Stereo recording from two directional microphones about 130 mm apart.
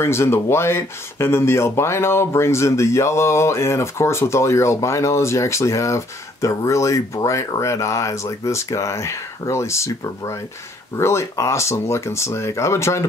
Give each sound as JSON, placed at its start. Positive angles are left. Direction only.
{"t": 0.0, "sound": "speech", "side_deg": 20}